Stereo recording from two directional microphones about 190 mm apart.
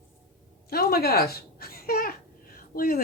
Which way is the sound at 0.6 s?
55° left (ahead or behind).